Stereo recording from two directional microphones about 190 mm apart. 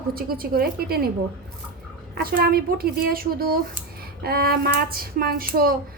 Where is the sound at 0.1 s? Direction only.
50° right (ahead or behind).